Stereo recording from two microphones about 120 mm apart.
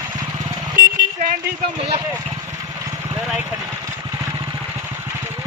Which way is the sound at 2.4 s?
25° right (ahead or behind).